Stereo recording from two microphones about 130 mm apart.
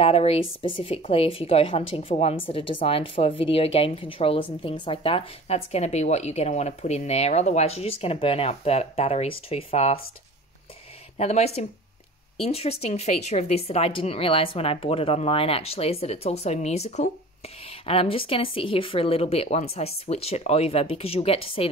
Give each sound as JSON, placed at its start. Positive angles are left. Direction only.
{"t": 0.0, "sound": "speech", "side_deg": 50}
{"t": 11.1, "sound": "speech", "side_deg": 55}
{"t": 17.8, "sound": "speech", "side_deg": 50}